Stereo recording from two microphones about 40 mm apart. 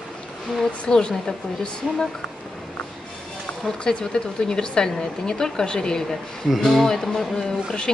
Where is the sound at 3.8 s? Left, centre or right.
Left.